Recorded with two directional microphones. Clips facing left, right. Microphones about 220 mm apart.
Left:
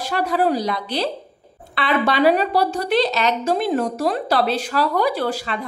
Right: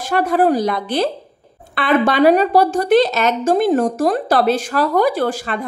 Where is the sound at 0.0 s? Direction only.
50° right (ahead or behind).